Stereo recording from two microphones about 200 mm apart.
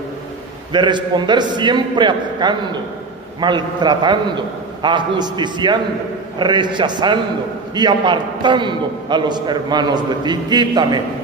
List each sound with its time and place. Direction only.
0.7 s a man's voice: 20° right (ahead or behind)